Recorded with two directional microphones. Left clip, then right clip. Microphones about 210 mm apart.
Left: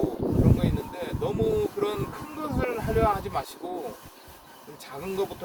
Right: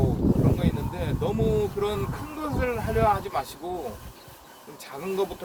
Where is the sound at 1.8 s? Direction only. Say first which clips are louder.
Right 1 dB; 15° right (ahead or behind).